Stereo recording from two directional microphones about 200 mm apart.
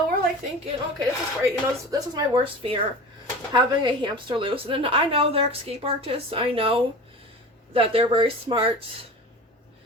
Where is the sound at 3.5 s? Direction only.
25° right (ahead or behind).